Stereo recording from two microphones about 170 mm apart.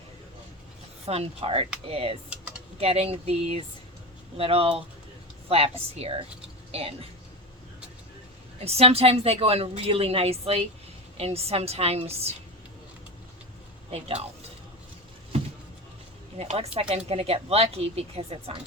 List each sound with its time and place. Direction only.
1.0 s a woman's voice: 35° right (ahead or behind)
8.6 s a woman's voice: 35° right (ahead or behind)
13.9 s a woman's voice: 35° right (ahead or behind)
16.4 s a woman's voice: 35° right (ahead or behind)